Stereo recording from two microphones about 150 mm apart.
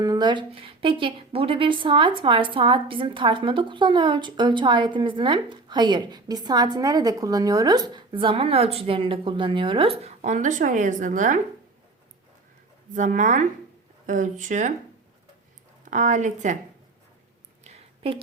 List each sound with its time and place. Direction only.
0.0 s a woman's voice: 25° right (ahead or behind)
10.2 s a woman's voice: 55° right (ahead or behind)
12.9 s a woman's voice: 55° right (ahead or behind)
15.9 s a woman's voice: 55° right (ahead or behind)
17.6 s a sound: 40° right (ahead or behind)